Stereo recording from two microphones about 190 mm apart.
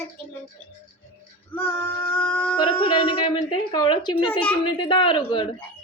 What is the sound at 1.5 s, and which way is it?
Female singing, 5° left (ahead or behind).